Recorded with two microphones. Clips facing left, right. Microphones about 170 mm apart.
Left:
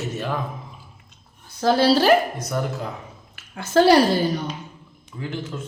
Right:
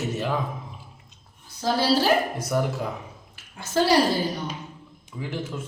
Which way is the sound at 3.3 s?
65° left (ahead or behind).